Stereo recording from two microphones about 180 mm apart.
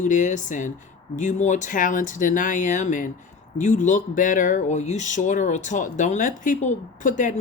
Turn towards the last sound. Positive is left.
turn(degrees=45)  # may be behind; listen again after turning